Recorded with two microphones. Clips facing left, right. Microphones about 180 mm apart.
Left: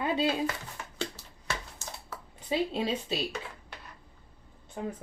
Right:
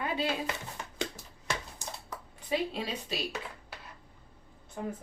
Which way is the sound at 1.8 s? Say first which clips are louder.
Right 1 dB; 15° right (ahead or behind).